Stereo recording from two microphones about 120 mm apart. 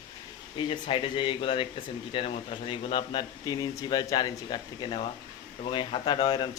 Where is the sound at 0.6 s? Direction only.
45° left (ahead or behind).